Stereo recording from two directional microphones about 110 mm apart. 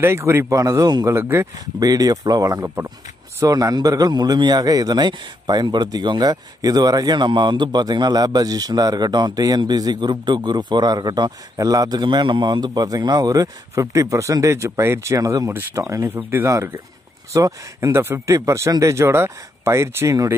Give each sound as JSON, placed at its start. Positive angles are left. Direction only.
{"t": 0.0, "sound": "speech", "side_deg": -25}
{"t": 1.1, "sound": "speech", "side_deg": -25}
{"t": 1.8, "sound": "a man's voice", "side_deg": -35}
{"t": 2.6, "sound": "speech", "side_deg": -20}
{"t": 3.3, "sound": "a man's voice", "side_deg": -30}